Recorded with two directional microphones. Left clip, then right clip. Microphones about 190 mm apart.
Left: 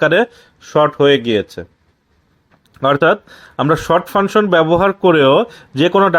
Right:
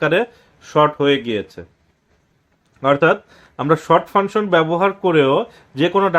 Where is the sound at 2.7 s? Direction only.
45° left (ahead or behind).